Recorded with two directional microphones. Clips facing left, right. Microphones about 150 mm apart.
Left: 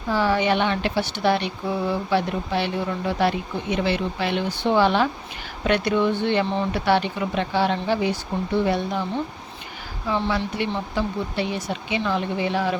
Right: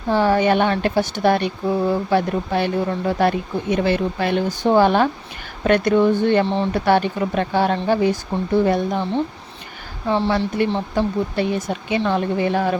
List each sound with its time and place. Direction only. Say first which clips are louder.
0.1 s speech: right 4 dB; 45° right (ahead or behind)
6.4 s speech: right 4 dB; 30° right (ahead or behind)
6.7 s speech: right 4 dB; 45° right (ahead or behind)
10.1 s speech: right 5 dB; 35° right (ahead or behind); by 12.7 s 50° right (ahead or behind)